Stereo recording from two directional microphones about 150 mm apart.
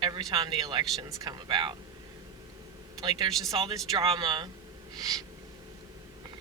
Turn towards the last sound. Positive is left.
turn(degrees=-25)  # may be behind; listen again after turning